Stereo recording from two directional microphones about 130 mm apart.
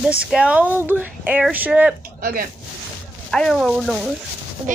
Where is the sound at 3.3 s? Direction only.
5° left (ahead or behind).